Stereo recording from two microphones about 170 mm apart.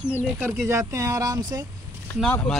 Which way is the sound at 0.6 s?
20° right (ahead or behind).